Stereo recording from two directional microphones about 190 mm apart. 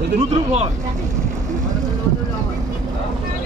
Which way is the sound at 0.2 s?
35° right (ahead or behind).